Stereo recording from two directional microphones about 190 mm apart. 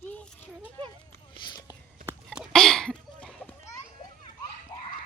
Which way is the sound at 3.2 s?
5° left (ahead or behind).